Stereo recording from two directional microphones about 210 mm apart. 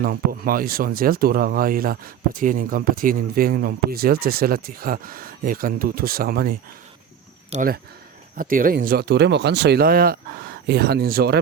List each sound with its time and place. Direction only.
0.0 s speech: 45° right (ahead or behind)